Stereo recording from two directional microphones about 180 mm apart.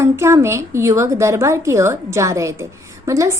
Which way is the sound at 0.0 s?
15° right (ahead or behind).